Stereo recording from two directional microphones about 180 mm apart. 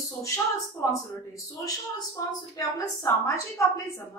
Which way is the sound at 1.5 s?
20° left (ahead or behind).